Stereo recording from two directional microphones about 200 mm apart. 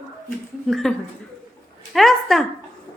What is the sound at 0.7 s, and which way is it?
Speech, centre (ahead or behind).